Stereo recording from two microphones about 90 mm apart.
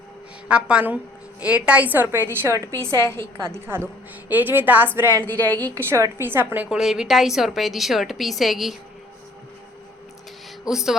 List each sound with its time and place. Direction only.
0.4 s a woman's voice: 10° right (ahead or behind)
2.5 s a woman's voice: 35° right (ahead or behind)
5.2 s a woman's voice: 15° left (ahead or behind)
5.8 s a woman's voice: 25° right (ahead or behind)
6.7 s a woman's voice: 5° right (ahead or behind)
10.7 s a woman's voice: 5° right (ahead or behind)